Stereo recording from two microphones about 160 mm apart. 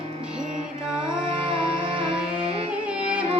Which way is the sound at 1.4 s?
35° right (ahead or behind).